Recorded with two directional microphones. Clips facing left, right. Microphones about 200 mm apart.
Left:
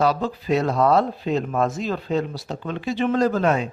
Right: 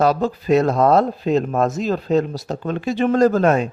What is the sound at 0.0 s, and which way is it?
Speech, 45° right (ahead or behind).